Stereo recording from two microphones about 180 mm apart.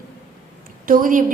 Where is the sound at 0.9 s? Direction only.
50° right (ahead or behind).